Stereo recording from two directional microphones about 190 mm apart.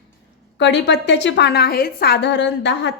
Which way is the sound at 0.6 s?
65° left (ahead or behind).